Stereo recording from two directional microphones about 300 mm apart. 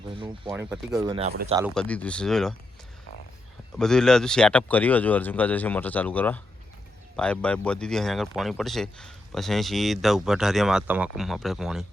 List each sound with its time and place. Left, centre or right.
0.1 s speech: centre
0.5 s speech: centre
1.0 s speech: centre
1.7 s speech: centre
3.8 s speech: centre